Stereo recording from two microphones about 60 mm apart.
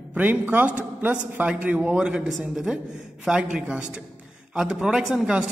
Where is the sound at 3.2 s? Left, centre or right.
Centre.